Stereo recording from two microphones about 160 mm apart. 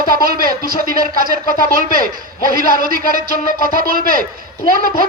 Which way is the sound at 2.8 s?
65° right (ahead or behind).